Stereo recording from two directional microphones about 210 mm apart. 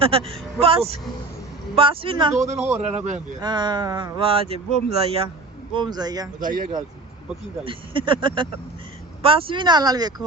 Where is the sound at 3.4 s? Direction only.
20° right (ahead or behind).